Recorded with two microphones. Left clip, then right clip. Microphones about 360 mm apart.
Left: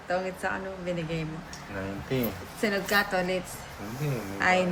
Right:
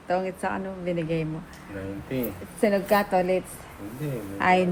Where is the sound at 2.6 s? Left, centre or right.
Centre.